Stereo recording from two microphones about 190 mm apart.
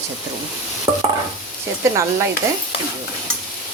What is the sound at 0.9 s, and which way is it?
Stir, 15° right (ahead or behind).